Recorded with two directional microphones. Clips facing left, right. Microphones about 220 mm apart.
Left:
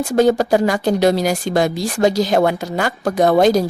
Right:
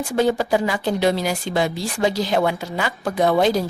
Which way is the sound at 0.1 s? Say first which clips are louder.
Left 5 dB; 45° left (ahead or behind).